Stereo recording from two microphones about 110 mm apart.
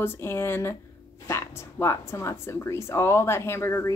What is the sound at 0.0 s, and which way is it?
Speech, 20° left (ahead or behind).